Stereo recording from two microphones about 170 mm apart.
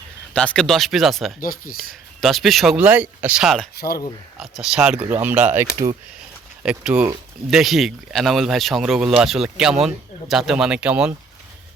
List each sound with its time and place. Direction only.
0.3 s speech: 5° left (ahead or behind)
1.4 s speech: 60° left (ahead or behind)
2.2 s speech: centre (ahead or behind)
3.8 s speech: 65° left (ahead or behind)
4.4 s speech: centre (ahead or behind)